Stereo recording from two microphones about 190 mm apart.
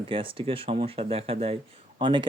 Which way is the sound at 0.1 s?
25° right (ahead or behind).